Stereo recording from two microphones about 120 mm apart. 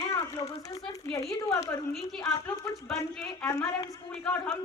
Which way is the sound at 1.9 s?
Centre (ahead or behind).